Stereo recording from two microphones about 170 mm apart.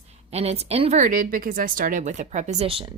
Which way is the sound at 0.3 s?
40° right (ahead or behind).